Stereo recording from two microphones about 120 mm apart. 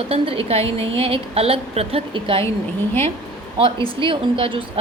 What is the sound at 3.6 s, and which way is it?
A woman's voice, 45° right (ahead or behind).